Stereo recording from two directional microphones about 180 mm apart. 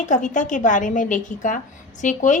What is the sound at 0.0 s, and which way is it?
Speech, 45° left (ahead or behind).